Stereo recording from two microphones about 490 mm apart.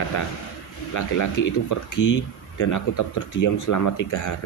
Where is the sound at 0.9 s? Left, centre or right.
Left.